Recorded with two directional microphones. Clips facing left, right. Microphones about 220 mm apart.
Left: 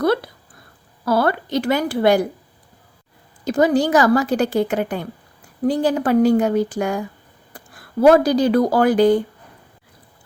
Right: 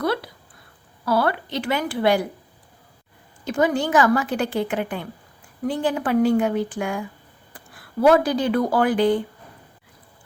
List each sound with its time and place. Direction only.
1.0 s speech: 40° left (ahead or behind)
3.4 s a woman's voice: 35° left (ahead or behind)
8.0 s a woman's voice: 40° left (ahead or behind)